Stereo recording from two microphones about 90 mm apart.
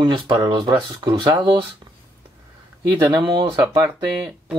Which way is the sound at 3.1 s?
55° right (ahead or behind).